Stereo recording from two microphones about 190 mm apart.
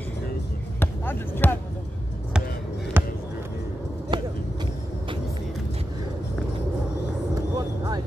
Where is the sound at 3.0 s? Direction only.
10° right (ahead or behind).